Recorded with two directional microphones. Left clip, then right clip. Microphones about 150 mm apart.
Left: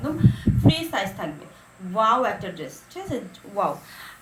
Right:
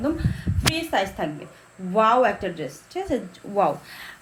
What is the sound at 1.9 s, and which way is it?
Speech, 70° right (ahead or behind).